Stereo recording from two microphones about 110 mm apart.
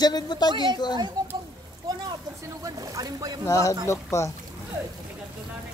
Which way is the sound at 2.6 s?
35° right (ahead or behind).